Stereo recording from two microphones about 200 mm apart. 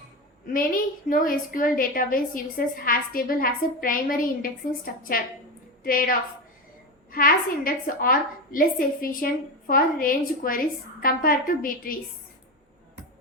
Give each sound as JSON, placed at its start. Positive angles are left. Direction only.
{"t": 0.4, "sound": "a woman's voice", "side_deg": 45}
{"t": 5.8, "sound": "a woman's voice", "side_deg": 45}